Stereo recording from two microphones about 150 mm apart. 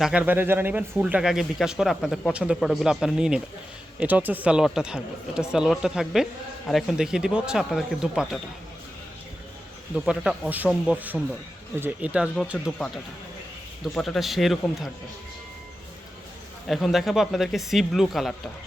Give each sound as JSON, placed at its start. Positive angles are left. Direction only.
{"t": 0.0, "sound": "speech", "side_deg": -10}
{"t": 9.9, "sound": "speech", "side_deg": -5}
{"t": 13.8, "sound": "speech", "side_deg": 0}
{"t": 16.6, "sound": "speech", "side_deg": 0}